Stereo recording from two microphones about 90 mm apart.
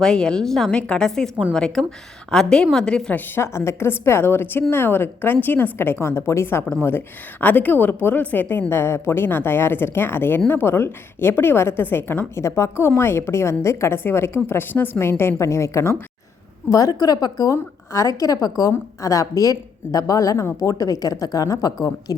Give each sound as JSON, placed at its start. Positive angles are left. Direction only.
{"t": 0.0, "sound": "a woman's voice", "side_deg": 10}
{"t": 3.2, "sound": "a woman's voice", "side_deg": 30}